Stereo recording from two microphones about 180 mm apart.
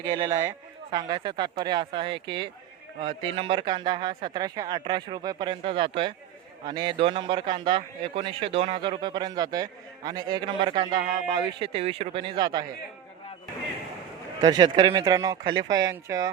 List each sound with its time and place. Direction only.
0.0 s a man's voice: 25° right (ahead or behind)
14.4 s a man's voice: 25° right (ahead or behind)